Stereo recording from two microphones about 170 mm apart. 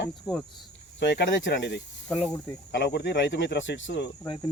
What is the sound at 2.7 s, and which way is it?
Speech, 80° left.